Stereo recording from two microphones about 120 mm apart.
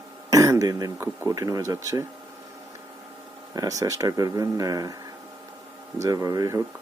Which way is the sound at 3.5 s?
30° right (ahead or behind).